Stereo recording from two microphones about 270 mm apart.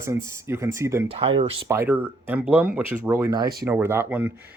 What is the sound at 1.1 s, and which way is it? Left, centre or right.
Speech, right.